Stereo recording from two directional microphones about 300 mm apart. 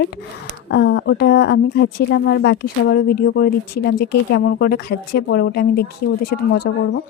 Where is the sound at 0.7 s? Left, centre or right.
Left.